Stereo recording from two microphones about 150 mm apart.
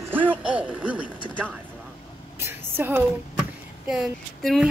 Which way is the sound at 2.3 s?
15° right (ahead or behind).